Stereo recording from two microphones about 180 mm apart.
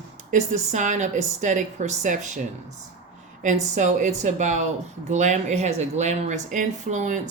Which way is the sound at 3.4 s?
40° right (ahead or behind).